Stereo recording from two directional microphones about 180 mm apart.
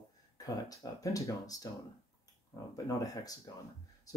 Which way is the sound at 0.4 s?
20° left (ahead or behind).